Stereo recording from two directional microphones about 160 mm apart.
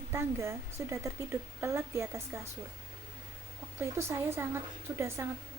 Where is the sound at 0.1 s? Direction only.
15° right (ahead or behind).